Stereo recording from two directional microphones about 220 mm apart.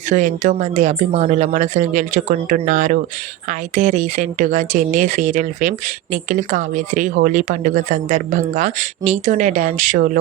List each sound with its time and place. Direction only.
0.1 s speech: 35° right (ahead or behind)